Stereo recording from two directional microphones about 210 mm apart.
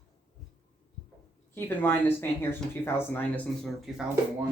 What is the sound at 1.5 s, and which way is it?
A woman's voice, 10° left (ahead or behind).